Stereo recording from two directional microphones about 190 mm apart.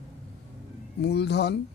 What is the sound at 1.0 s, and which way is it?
Speech, 60° left (ahead or behind).